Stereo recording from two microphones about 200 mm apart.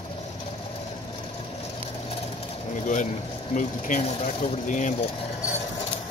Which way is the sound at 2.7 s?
40° left (ahead or behind).